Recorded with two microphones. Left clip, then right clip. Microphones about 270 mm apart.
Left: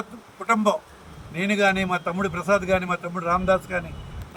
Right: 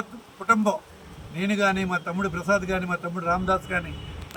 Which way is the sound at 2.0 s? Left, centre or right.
Right.